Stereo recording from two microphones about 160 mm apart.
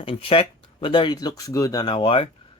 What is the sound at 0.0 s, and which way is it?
Speech, 35° left (ahead or behind).